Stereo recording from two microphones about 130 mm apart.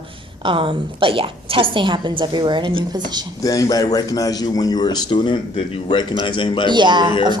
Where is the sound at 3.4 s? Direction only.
25° left (ahead or behind).